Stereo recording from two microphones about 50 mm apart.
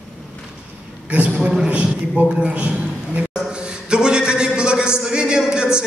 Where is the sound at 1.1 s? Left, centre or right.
Right.